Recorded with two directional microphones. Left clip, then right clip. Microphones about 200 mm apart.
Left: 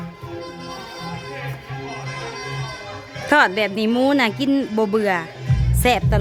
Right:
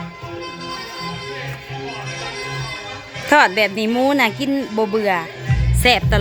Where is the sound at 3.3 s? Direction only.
Centre (ahead or behind).